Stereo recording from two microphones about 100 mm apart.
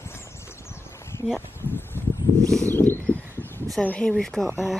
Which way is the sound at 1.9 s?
25° left (ahead or behind).